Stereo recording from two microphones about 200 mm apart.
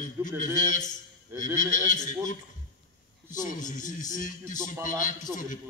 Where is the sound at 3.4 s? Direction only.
40° left (ahead or behind).